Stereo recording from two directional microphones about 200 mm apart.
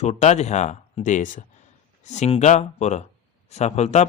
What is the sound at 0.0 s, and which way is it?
A man's voice, 35° left (ahead or behind).